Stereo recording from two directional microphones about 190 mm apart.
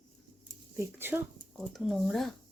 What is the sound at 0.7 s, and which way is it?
Speech, 10° right (ahead or behind).